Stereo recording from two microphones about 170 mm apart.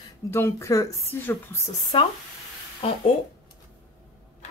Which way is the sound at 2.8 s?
35° left (ahead or behind).